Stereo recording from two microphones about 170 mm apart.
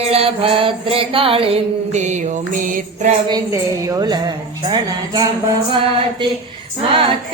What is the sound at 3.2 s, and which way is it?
A woman's voice, 20° right (ahead or behind).